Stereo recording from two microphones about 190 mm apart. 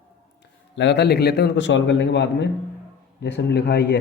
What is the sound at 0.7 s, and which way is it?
Speech, 70° left (ahead or behind).